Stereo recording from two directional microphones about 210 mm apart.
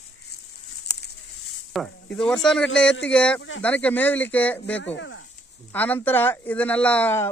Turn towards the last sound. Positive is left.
turn(degrees=10)  # may be behind; listen again after turning